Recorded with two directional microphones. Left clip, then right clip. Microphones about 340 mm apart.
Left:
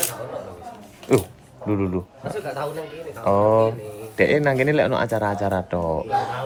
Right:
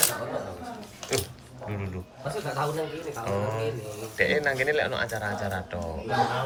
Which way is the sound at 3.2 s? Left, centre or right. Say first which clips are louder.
Left 14 dB; centre.